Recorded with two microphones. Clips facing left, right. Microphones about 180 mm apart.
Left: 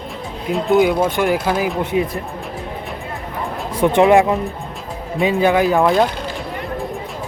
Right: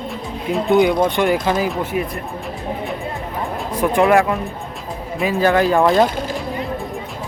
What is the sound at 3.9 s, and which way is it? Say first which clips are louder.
Speech: left 2 dB; 25° left (ahead or behind).